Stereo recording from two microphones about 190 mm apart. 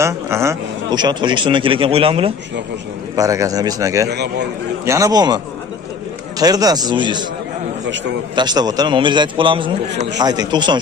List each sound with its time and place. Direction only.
0.0 s a man's voice: 15° right (ahead or behind)
3.2 s a man's voice: 15° right (ahead or behind)
7.8 s a man's voice: 75° right (ahead or behind)
8.4 s a man's voice: 20° right (ahead or behind)